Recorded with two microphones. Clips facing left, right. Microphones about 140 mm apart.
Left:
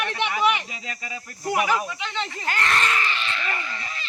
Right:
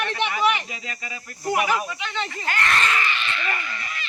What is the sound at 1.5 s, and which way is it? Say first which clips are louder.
Speech: even; 10° right (ahead or behind).